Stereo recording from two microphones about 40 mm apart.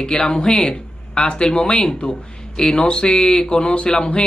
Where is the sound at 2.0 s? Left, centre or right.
Left.